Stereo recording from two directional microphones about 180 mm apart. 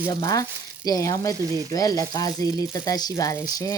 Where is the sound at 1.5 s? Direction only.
20° right (ahead or behind).